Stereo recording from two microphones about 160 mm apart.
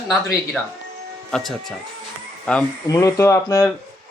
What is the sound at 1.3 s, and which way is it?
Speech, centre (ahead or behind).